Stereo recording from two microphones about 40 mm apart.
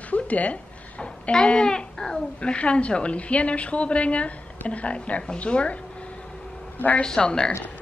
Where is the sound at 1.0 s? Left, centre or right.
Left.